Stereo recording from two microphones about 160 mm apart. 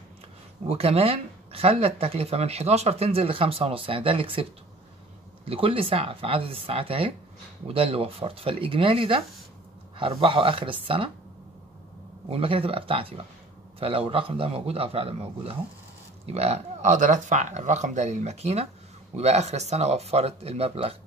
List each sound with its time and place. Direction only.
0.7 s speech: 40° right (ahead or behind)
5.5 s speech: 35° right (ahead or behind)
12.3 s speech: 35° right (ahead or behind)